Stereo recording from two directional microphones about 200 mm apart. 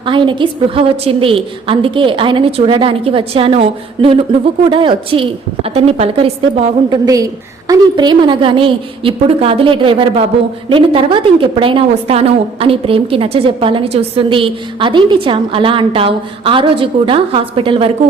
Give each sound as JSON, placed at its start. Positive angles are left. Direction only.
{"t": 0.0, "sound": "a woman's voice", "side_deg": -25}